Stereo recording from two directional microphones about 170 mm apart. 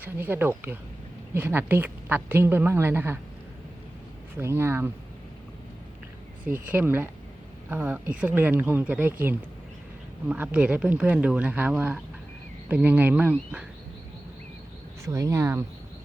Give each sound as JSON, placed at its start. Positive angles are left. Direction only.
{"t": 0.0, "sound": "a woman's voice", "side_deg": -10}
{"t": 4.4, "sound": "a woman's voice", "side_deg": -15}
{"t": 6.4, "sound": "a woman's voice", "side_deg": -10}
{"t": 10.2, "sound": "a woman's voice", "side_deg": -10}
{"t": 15.0, "sound": "a woman's voice", "side_deg": -20}